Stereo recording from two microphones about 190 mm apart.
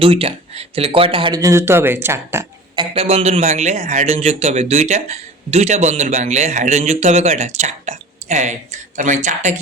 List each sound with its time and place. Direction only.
0.0 s speech: 30° right (ahead or behind); by 2.8 s 15° right (ahead or behind)
2.9 s speech: 30° right (ahead or behind)